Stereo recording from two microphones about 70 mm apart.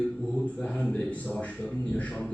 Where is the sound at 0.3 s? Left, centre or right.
Centre.